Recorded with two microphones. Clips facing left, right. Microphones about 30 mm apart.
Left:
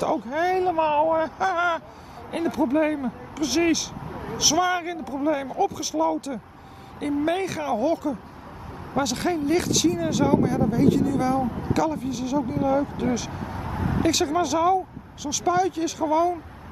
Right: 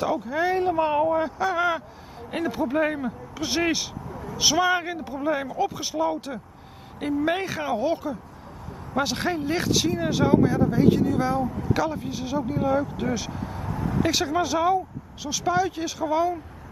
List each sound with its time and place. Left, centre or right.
0.0 s a man's voice: centre
4.1 s vehicle: left
4.4 s a man's voice: centre
12.4 s a man's voice: centre
13.3 s vehicle: centre
13.6 s vehicle: left
14.0 s a man's voice: centre